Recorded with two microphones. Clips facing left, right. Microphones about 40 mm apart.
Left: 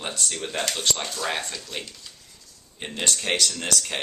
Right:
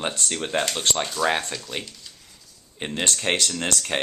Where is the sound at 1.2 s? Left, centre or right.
Centre.